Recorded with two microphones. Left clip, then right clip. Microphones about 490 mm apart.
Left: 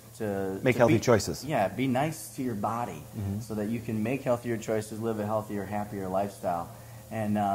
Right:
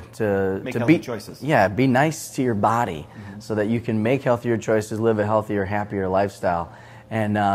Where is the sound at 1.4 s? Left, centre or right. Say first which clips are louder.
Right 10 dB; right.